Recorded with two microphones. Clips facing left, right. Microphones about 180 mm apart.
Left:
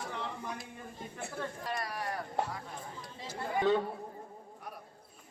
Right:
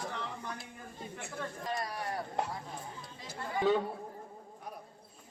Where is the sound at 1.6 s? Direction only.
20° right (ahead or behind).